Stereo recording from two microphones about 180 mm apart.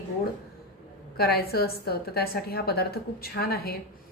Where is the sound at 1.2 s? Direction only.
60° left (ahead or behind).